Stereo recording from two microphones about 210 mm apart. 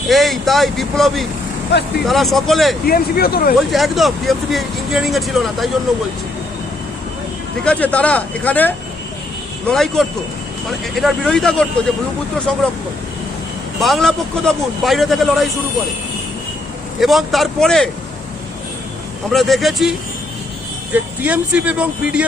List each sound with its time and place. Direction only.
0.1 s speech: centre (ahead or behind)
2.8 s speech: 45° left (ahead or behind)
3.7 s speech: centre (ahead or behind)
7.6 s speech: 5° left (ahead or behind)
13.7 s speech: centre (ahead or behind)
17.0 s speech: centre (ahead or behind)
19.3 s speech: centre (ahead or behind)
20.9 s speech: 5° right (ahead or behind)